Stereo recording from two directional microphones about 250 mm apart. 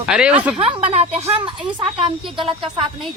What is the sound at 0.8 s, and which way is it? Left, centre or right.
Speech, right.